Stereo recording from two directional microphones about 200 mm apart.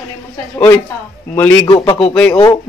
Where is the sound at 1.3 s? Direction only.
10° left (ahead or behind).